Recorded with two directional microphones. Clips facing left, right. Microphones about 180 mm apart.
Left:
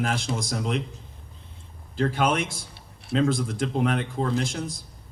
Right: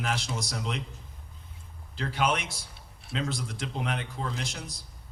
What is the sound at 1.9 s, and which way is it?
A man's voice, 50° left (ahead or behind).